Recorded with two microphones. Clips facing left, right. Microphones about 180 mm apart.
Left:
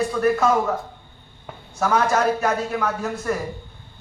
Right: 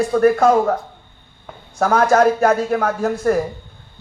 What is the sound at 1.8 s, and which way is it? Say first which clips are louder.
A man's voice: right 6 dB; 50° right (ahead or behind).